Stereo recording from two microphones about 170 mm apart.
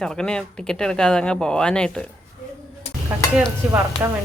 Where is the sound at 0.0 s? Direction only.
5° left (ahead or behind).